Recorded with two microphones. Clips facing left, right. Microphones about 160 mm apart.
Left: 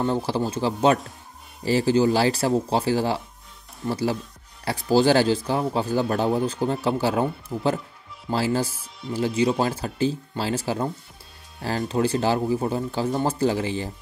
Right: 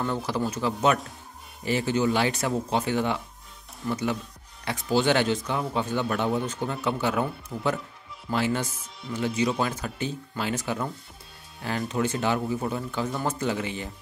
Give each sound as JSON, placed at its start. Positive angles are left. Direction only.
{"t": 0.0, "sound": "a man's voice", "side_deg": 30}